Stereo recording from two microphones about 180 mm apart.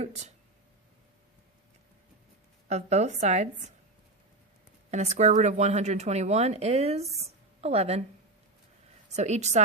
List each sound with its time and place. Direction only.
0.0 s speech: 40° right (ahead or behind)
2.6 s speech: 40° right (ahead or behind)
4.9 s speech: 40° right (ahead or behind)
9.1 s speech: 40° right (ahead or behind)